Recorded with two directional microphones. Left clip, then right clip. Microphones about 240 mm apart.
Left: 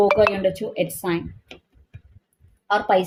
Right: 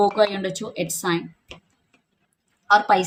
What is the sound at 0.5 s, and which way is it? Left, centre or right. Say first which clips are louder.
Speech: left 3 dB; centre.